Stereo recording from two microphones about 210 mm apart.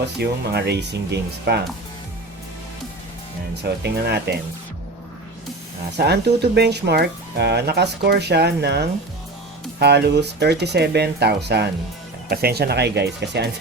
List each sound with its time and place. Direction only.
0.2 s speech: 50° right (ahead or behind)
3.6 s speech: 50° right (ahead or behind)
6.0 s speech: 50° right (ahead or behind)